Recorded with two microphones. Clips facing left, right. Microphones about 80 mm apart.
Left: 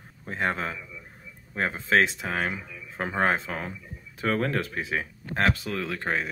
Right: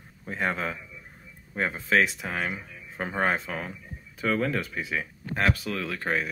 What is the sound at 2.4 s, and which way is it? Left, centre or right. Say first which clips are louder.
Speech: left 2 dB; left.